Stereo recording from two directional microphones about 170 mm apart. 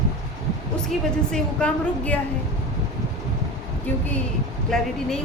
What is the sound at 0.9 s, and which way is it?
A woman's voice, 5° left (ahead or behind).